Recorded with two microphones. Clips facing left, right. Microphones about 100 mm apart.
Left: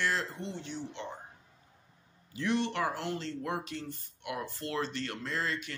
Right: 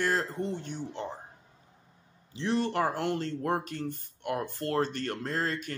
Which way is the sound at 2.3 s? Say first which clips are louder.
Right 3 dB; 35° right (ahead or behind).